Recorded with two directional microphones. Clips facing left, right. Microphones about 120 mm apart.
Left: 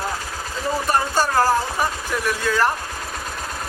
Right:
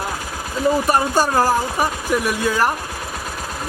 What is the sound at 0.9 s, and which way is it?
Speech, 15° right (ahead or behind).